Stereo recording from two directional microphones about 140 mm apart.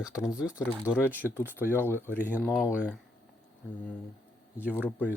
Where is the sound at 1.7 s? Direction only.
15° left (ahead or behind).